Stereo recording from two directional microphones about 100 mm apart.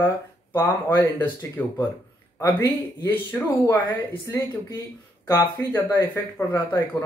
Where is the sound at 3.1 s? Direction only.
20° left (ahead or behind).